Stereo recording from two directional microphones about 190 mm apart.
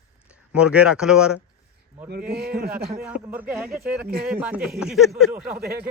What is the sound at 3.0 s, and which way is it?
Speech, 10° right (ahead or behind).